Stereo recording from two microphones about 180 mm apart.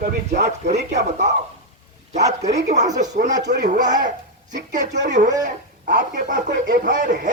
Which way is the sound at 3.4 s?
70° right (ahead or behind).